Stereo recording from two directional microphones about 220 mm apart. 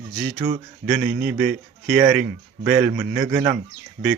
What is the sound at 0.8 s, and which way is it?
A man's voice, 5° right (ahead or behind).